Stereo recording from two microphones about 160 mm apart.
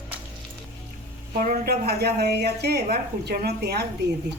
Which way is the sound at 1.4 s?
65° right (ahead or behind).